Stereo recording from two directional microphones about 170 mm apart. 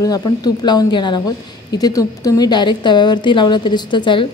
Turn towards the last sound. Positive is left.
turn(degrees=30)  # may be behind; listen again after turning